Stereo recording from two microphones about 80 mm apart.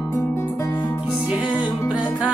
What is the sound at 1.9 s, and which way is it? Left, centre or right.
Music, centre.